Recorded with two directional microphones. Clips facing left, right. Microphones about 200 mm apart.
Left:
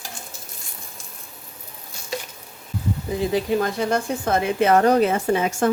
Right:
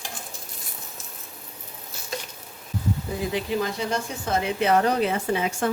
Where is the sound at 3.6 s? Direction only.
55° left (ahead or behind).